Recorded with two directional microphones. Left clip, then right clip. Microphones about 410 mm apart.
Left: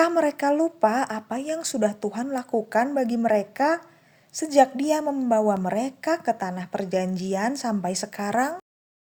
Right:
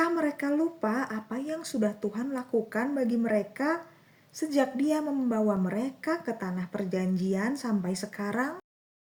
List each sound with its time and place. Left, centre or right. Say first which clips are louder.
0.0 s a woman's voice: left 7 dB; left